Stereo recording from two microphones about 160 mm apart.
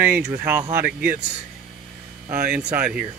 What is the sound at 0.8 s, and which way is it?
Speech, 65° right (ahead or behind).